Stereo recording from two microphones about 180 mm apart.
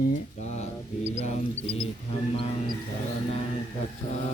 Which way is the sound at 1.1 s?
40° left (ahead or behind).